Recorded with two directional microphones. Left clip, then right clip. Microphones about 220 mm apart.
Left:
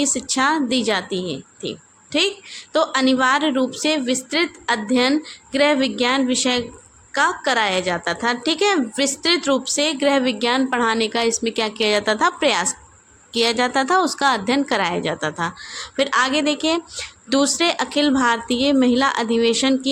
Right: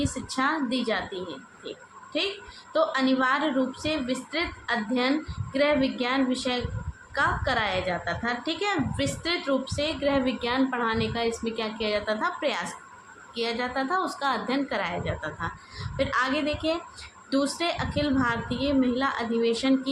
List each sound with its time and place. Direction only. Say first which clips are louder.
0.0 s a woman's voice: left 8 dB; 50° left (ahead or behind)
2.7 s a woman's voice: left 6 dB; 50° left (ahead or behind)